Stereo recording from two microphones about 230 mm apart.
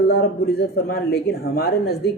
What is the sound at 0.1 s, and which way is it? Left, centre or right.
Speech, left.